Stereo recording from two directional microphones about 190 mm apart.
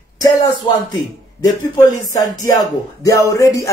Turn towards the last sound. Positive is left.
turn(degrees=15)  # may be behind; listen again after turning